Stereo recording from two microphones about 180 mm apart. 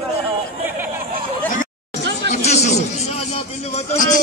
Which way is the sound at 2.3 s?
40° left (ahead or behind).